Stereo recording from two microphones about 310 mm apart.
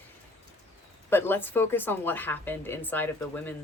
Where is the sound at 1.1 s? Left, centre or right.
Centre.